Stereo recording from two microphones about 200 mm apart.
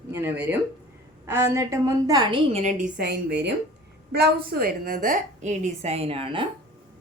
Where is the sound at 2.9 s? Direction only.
50° right (ahead or behind); by 6.4 s 30° right (ahead or behind).